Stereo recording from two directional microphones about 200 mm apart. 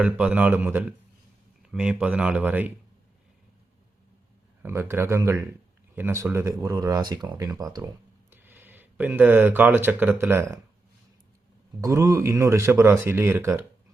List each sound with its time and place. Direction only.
0.0 s speech: 5° right (ahead or behind)
4.6 s speech: 10° right (ahead or behind)
11.8 s speech: 15° right (ahead or behind)